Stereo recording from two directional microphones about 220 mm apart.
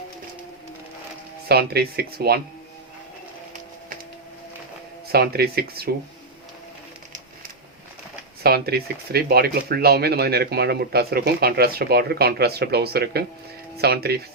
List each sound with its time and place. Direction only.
1.5 s speech: 45° right (ahead or behind)
5.1 s speech: 45° right (ahead or behind)
8.4 s speech: 45° right (ahead or behind)